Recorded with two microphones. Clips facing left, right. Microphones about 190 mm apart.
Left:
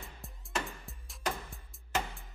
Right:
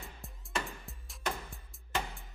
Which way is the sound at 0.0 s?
Centre (ahead or behind).